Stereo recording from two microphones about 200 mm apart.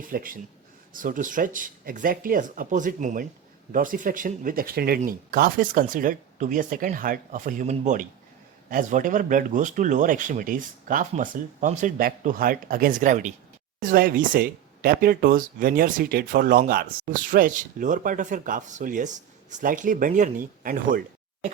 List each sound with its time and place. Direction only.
0.1 s speech: 45° right (ahead or behind)